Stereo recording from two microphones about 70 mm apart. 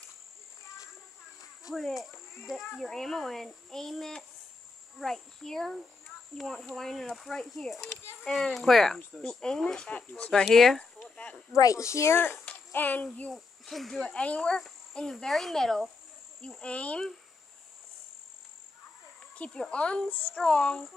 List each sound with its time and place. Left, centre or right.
1.7 s speech: centre
11.5 s speech: left
12.7 s a child's voice: left
13.3 s speech: centre
14.1 s speech: centre
19.3 s speech: centre